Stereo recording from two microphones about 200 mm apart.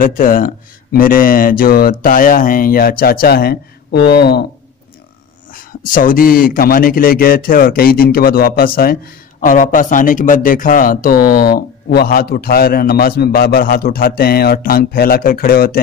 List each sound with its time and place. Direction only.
0.0 s speech: 45° left (ahead or behind)
5.5 s speech: 45° left (ahead or behind)